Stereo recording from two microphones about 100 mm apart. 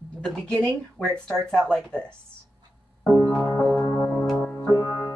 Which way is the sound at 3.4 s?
20° left (ahead or behind).